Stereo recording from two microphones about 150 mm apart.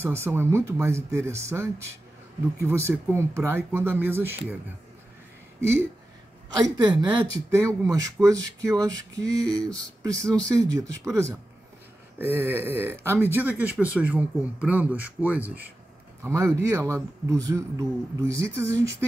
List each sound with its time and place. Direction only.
0.0 s speech: 15° right (ahead or behind)
5.6 s speech: 15° right (ahead or behind)
6.5 s speech: 30° right (ahead or behind)